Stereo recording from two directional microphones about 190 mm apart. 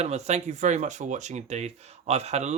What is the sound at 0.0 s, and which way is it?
Speech, 35° right (ahead or behind).